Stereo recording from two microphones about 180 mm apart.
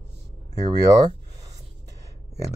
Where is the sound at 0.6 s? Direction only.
20° right (ahead or behind).